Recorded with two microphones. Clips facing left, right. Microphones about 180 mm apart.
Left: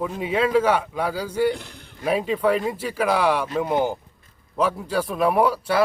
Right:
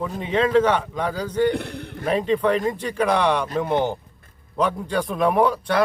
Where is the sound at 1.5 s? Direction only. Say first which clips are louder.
Right 6 dB; 65° right (ahead or behind).